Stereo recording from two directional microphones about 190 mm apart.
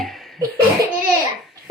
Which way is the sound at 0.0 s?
Centre (ahead or behind).